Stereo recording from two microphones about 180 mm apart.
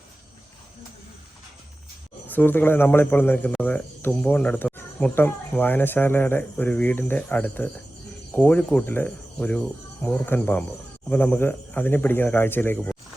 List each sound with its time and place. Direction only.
2.2 s speech: 10° left (ahead or behind)